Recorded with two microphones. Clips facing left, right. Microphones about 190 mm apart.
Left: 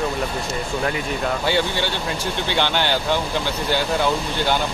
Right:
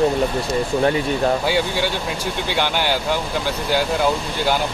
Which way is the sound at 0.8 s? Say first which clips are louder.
Right 6 dB; 30° right (ahead or behind).